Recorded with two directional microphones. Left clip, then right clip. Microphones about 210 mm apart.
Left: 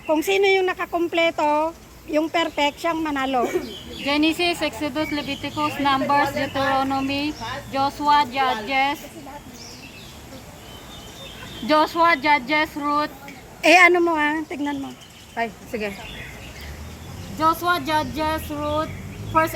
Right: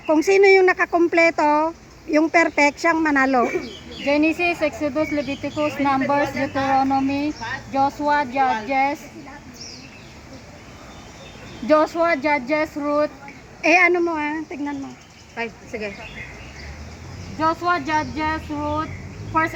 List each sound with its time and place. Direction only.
0.2 s speech: 10° right (ahead or behind)
0.6 s speech: 30° right (ahead or behind)
0.9 s speech: 15° right (ahead or behind); by 9.0 s 35° right (ahead or behind)
11.7 s speech: 35° right (ahead or behind)
13.6 s speech: 5° left (ahead or behind)
15.4 s speech: 40° left (ahead or behind)
17.4 s speech: 10° right (ahead or behind)